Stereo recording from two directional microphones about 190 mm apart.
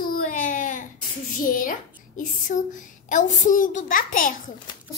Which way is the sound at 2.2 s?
45° left (ahead or behind).